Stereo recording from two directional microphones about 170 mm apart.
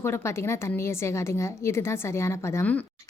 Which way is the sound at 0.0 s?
15° left (ahead or behind).